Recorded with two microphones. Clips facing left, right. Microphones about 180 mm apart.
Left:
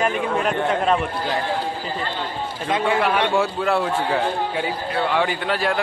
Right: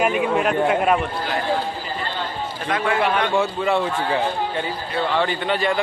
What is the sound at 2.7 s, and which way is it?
Speech, 20° left (ahead or behind).